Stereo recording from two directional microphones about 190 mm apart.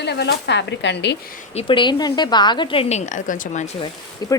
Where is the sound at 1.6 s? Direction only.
25° left (ahead or behind).